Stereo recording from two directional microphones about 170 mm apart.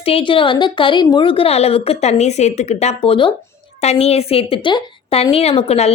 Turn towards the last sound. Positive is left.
turn(degrees=35)  # may be behind; listen again after turning